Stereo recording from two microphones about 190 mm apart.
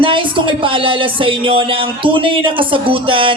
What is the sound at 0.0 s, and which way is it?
Music, 25° right (ahead or behind).